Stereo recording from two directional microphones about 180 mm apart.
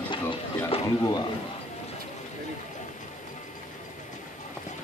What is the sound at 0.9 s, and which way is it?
Speech, 20° left (ahead or behind).